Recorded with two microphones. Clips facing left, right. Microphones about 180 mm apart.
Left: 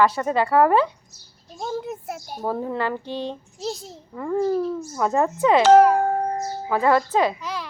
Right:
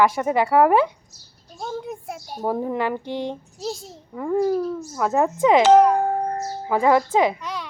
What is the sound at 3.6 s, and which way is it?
Speech, centre (ahead or behind).